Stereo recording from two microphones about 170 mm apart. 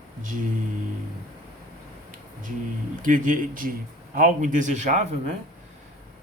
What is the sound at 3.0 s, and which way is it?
Speech, 50° right (ahead or behind).